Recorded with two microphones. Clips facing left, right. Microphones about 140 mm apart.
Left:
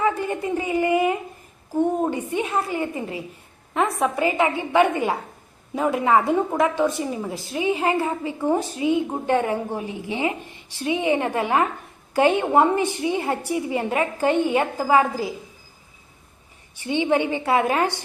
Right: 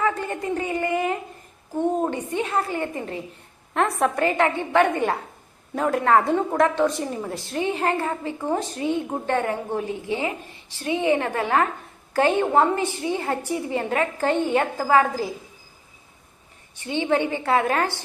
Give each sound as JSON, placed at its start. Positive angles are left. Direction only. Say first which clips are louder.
{"t": 0.0, "sound": "a sound", "louder": "left 2 dB", "side_deg": 15}
{"t": 1.7, "sound": "a woman's voice", "louder": "left 2 dB", "side_deg": 10}
{"t": 3.8, "sound": "a woman's voice", "louder": "even", "side_deg": 0}
{"t": 16.8, "sound": "a woman's voice", "louder": "left 2 dB", "side_deg": 15}